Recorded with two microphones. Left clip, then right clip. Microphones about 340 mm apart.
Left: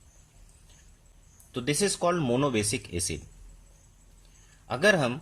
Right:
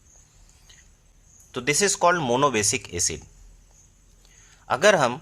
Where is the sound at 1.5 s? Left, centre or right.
Right.